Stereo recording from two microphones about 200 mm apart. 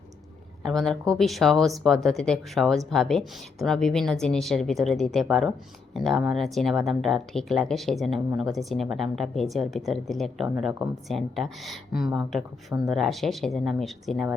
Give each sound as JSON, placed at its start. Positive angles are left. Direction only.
{"t": 0.6, "sound": "speech", "side_deg": 0}